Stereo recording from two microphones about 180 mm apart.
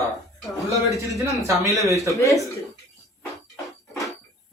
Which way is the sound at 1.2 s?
15° right (ahead or behind).